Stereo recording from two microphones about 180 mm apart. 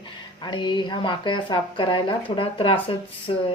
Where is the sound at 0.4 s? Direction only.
25° left (ahead or behind).